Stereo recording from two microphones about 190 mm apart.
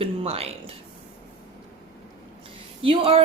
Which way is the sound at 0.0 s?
30° right (ahead or behind).